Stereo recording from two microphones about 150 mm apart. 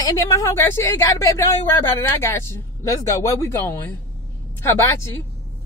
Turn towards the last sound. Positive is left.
turn(degrees=15)  # may be behind; listen again after turning